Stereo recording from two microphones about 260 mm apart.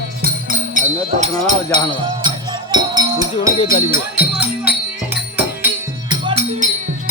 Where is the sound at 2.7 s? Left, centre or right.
Centre.